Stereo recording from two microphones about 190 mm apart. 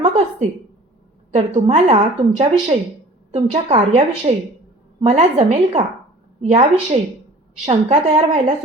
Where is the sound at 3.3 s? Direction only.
35° right (ahead or behind).